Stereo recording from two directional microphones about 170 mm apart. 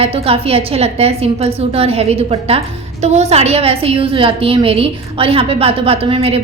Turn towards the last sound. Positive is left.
turn(degrees=-35)  # may be behind; listen again after turning